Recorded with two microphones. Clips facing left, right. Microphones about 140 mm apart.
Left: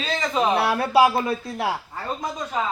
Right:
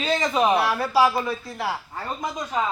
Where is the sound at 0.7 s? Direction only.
60° left (ahead or behind).